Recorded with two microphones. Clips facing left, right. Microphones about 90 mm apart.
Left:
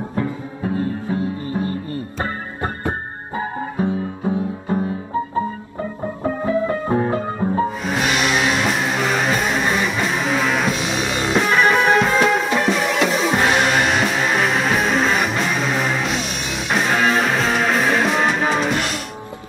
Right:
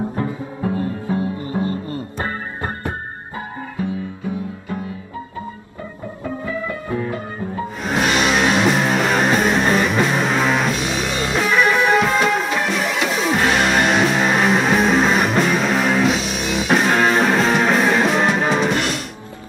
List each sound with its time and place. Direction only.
0.1 s music: 35° right (ahead or behind)
1.0 s music: 25° right (ahead or behind)
3.3 s music: 30° left (ahead or behind)
6.4 s music: 35° left (ahead or behind)
7.8 s music: centre (ahead or behind)